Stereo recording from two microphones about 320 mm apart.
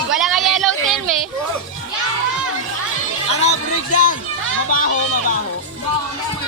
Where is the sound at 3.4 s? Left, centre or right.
Left.